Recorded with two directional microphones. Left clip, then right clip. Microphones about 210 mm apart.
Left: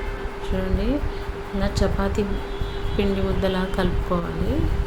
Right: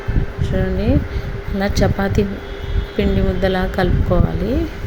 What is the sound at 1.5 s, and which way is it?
A woman's voice, 25° right (ahead or behind).